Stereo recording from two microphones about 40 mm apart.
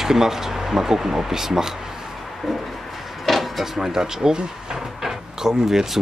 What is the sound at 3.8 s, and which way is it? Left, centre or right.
Speech, centre.